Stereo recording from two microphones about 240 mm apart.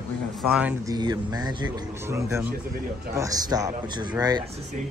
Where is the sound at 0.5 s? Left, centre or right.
Centre.